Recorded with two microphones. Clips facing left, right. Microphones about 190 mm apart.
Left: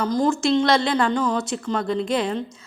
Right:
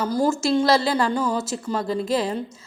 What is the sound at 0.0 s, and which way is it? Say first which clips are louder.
A woman's voice: left 1 dB; 10° right (ahead or behind).